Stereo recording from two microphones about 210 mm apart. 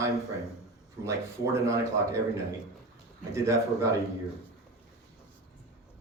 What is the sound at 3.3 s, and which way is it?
Speech, 15° right (ahead or behind).